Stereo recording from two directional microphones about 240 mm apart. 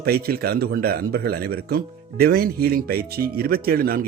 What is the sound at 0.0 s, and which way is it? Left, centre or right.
A man's voice, right.